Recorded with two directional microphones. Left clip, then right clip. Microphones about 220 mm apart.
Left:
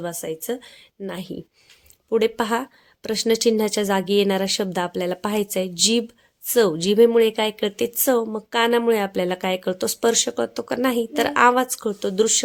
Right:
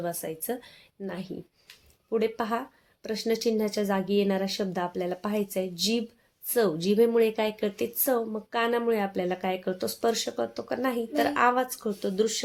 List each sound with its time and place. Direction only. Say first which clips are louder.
0.0 s a woman's voice: left 4 dB; 30° left (ahead or behind)